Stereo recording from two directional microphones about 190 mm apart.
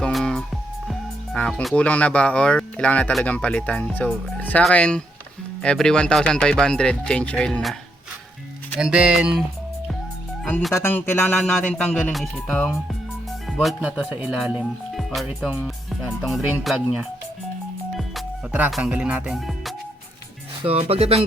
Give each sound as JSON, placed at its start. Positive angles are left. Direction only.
{"t": 0.0, "sound": "music", "side_deg": 0}
{"t": 0.9, "sound": "speech", "side_deg": 5}
{"t": 8.8, "sound": "speech", "side_deg": -5}
{"t": 10.4, "sound": "speech", "side_deg": 0}
{"t": 17.9, "sound": "music", "side_deg": 0}
{"t": 20.7, "sound": "speech", "side_deg": -35}